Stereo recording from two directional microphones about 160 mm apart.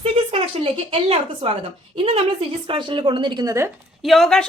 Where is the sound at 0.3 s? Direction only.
35° right (ahead or behind).